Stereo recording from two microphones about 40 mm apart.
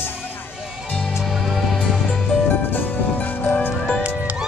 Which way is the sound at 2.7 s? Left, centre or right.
Left.